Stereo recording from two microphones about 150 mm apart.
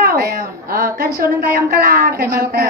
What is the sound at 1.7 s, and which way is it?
Speech, 75° right (ahead or behind).